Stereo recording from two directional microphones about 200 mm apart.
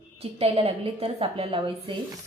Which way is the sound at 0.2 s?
30° right (ahead or behind).